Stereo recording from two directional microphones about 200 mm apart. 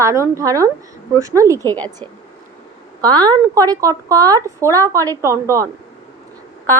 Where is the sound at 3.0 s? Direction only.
20° right (ahead or behind).